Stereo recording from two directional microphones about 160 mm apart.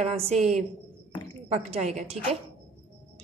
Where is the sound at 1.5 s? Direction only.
40° right (ahead or behind).